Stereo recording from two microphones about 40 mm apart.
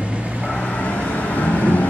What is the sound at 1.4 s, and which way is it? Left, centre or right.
Vehicle, left.